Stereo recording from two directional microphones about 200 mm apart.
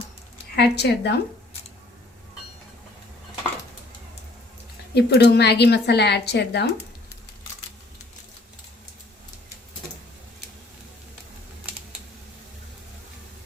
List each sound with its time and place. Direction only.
0.5 s speech: 55° left (ahead or behind)
4.9 s speech: 55° left (ahead or behind)